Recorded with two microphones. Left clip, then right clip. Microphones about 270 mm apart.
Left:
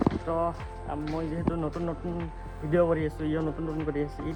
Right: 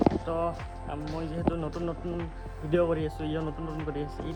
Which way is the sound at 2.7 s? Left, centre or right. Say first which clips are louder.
Left 2 dB; centre.